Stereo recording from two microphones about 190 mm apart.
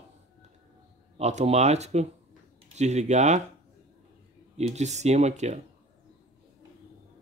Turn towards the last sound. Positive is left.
turn(degrees=-35)  # may be behind; listen again after turning